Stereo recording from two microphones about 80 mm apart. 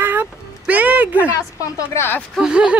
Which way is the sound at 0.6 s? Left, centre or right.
Centre.